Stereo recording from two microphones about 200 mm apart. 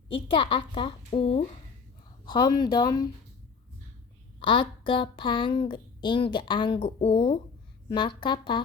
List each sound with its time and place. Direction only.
0.1 s speech: 25° left (ahead or behind)
4.4 s speech: 25° left (ahead or behind)